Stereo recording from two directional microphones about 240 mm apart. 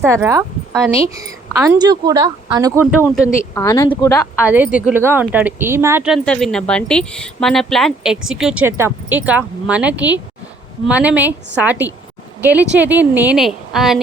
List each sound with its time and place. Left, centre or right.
0.0 s a woman's voice: centre
3.5 s speech: centre
4.4 s a woman's voice: centre